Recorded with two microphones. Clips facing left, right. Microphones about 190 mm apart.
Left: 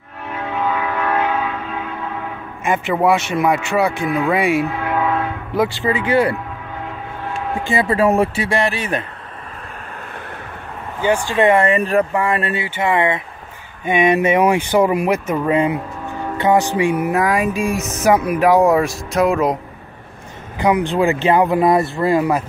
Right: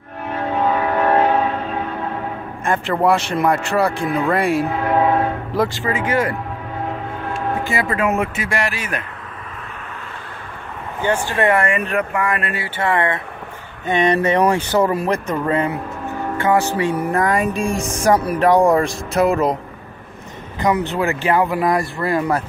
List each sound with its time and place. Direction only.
0.3 s train: 35° right (ahead or behind)
2.6 s speech: 5° left (ahead or behind)
4.8 s train: 30° right (ahead or behind)
5.8 s speech: 20° left (ahead or behind)
7.7 s speech: 30° left (ahead or behind)
11.3 s speech: 20° left (ahead or behind)
11.6 s speech: 35° left (ahead or behind)
12.6 s speech: 15° left (ahead or behind); by 19.6 s centre (ahead or behind)
20.5 s speech: 10° left (ahead or behind)